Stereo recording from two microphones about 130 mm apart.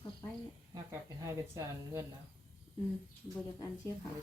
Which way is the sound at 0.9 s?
20° right (ahead or behind).